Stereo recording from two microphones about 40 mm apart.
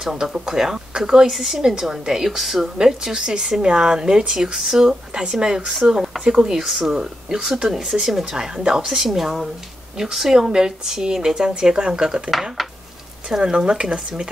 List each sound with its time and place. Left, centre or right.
0.0 s speech: centre
1.3 s speech: centre
6.2 s speech: right
6.5 s speech: centre
7.9 s speech: centre
8.3 s a woman's voice: centre
13.4 s speech: right